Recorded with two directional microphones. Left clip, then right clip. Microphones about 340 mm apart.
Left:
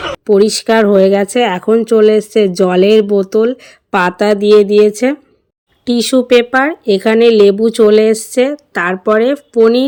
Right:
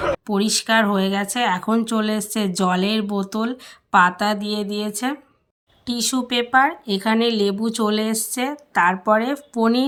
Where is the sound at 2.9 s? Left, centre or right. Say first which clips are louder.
Left 15 dB; centre.